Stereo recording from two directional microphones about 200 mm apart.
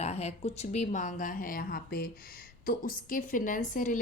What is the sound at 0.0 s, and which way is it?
A woman's voice, 30° left (ahead or behind).